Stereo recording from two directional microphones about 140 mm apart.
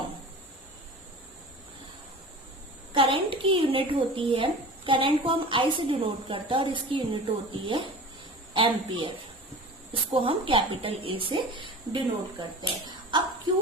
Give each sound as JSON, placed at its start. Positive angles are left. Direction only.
{"t": 2.9, "sound": "a woman's voice", "side_deg": -40}